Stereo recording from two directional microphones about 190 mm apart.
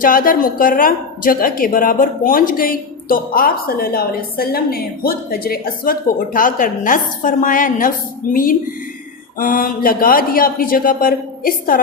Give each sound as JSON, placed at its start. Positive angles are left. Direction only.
{"t": 0.0, "sound": "a woman's voice", "side_deg": 45}